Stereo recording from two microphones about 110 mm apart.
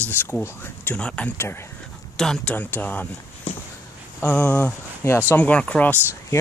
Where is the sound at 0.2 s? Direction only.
20° left (ahead or behind).